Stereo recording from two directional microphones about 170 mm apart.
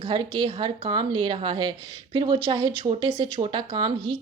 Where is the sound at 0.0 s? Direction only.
30° right (ahead or behind).